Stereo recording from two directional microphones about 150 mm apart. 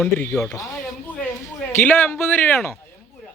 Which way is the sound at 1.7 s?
15° left (ahead or behind).